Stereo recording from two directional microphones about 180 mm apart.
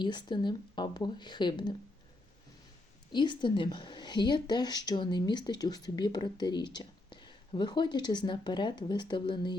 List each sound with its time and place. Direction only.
0.0 s speech: 25° left (ahead or behind)
3.1 s speech: 25° left (ahead or behind)